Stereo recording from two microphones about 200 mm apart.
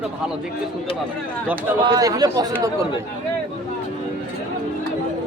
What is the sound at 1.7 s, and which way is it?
Speech, 15° right (ahead or behind).